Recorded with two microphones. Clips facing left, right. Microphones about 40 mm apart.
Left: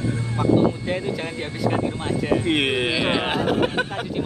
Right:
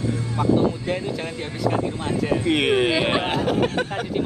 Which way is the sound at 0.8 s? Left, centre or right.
Centre.